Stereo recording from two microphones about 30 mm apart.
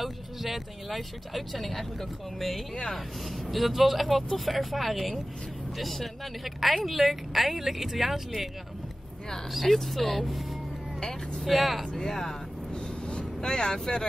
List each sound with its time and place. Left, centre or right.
0.0 s speech: centre
6.4 s speech: centre
9.5 s speech: centre
11.4 s speech: centre
11.9 s speech: centre
12.7 s vehicle: left